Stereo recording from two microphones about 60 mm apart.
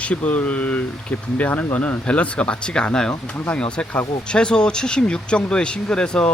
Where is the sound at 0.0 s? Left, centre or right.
Left.